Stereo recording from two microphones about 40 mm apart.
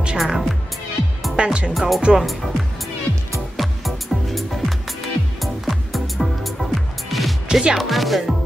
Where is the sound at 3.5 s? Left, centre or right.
Centre.